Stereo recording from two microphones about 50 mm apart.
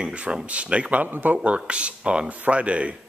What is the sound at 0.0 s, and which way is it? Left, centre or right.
Speech, right.